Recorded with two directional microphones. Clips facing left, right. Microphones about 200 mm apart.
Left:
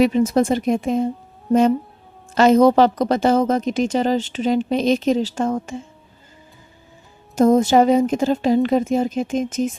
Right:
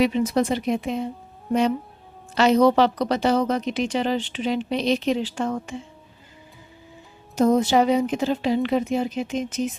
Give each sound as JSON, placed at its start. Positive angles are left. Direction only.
{"t": 0.0, "sound": "a woman's voice", "side_deg": 45}
{"t": 2.3, "sound": "a woman's voice", "side_deg": 45}
{"t": 7.3, "sound": "a woman's voice", "side_deg": 45}